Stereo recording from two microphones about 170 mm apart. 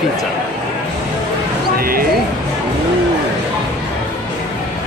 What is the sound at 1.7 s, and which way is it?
Speech, 60° right (ahead or behind).